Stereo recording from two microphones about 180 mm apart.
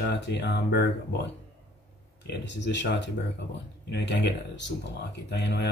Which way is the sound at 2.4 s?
80° left.